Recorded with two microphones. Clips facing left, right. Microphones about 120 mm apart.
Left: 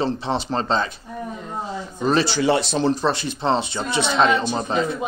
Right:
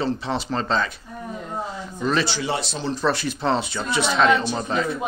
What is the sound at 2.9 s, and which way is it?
Speech, 25° left (ahead or behind).